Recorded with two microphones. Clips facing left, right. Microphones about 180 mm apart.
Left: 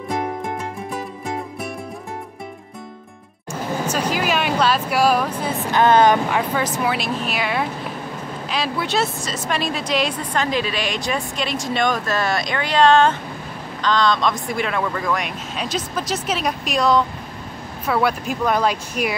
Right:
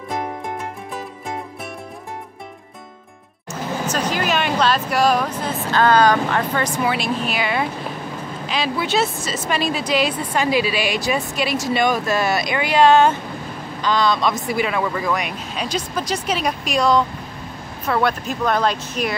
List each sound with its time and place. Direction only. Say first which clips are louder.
3.8 s vehicle: even; 5° left (ahead or behind)
5.7 s speech: left 1 dB; 20° left (ahead or behind)
6.3 s speech: even; 5° left (ahead or behind)